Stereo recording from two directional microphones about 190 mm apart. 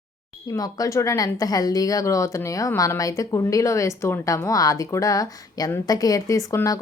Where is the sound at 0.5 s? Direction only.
20° left (ahead or behind).